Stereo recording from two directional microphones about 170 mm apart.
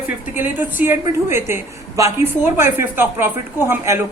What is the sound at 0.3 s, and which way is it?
Speech, 10° right (ahead or behind).